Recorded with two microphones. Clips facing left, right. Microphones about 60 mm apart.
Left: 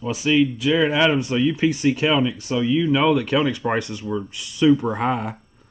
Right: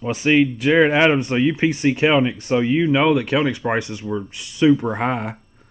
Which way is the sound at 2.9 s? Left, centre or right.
Centre.